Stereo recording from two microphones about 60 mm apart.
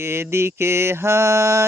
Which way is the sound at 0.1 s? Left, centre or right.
Right.